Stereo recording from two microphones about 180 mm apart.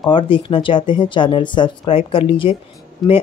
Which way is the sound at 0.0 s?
30° left (ahead or behind).